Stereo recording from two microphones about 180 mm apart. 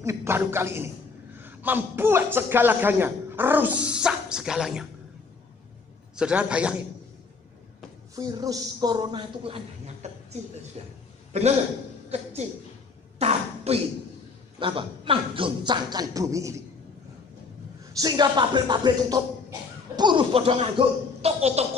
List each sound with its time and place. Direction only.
0.0 s a man's voice: 15° right (ahead or behind)
6.1 s a man's voice: 5° right (ahead or behind)
8.2 s speech: 20° right (ahead or behind)
10.0 s speech: 40° right (ahead or behind)
13.2 s speech: 35° right (ahead or behind); by 16.6 s 15° right (ahead or behind)
17.9 s speech: 25° right (ahead or behind)